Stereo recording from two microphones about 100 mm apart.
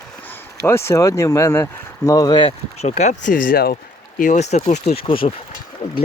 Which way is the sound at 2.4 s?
85° left.